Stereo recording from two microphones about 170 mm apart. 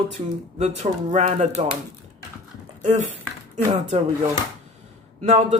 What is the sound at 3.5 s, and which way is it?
Speech, 40° right (ahead or behind).